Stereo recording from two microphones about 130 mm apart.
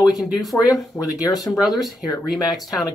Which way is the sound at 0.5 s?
30° left (ahead or behind).